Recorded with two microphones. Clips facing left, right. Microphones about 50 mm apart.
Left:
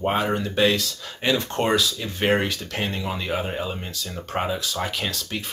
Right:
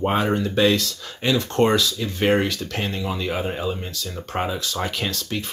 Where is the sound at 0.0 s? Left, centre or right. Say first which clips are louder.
Right 2 dB; centre.